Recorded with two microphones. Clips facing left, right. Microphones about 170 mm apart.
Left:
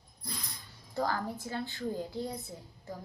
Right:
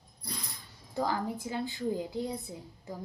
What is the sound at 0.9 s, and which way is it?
A woman's voice, 15° right (ahead or behind).